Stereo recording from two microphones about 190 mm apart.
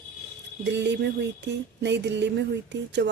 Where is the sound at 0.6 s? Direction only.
65° right (ahead or behind).